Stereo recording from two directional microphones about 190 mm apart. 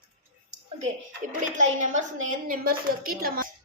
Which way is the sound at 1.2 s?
40° right (ahead or behind).